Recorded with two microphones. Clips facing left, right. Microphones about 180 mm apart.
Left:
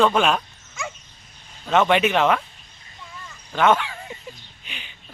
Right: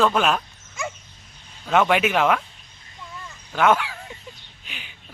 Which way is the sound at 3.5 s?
5° right (ahead or behind).